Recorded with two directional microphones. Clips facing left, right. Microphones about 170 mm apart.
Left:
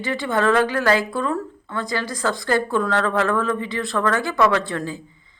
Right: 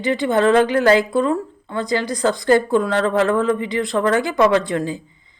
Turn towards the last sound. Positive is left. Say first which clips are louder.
# right 4 dB
turn(degrees=-15)  # may be behind; listen again after turning